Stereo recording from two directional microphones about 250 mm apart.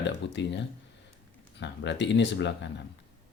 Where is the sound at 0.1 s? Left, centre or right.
Left.